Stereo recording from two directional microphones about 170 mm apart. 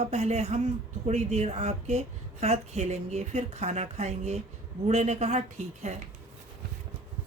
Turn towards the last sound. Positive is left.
turn(degrees=-40)  # may be behind; listen again after turning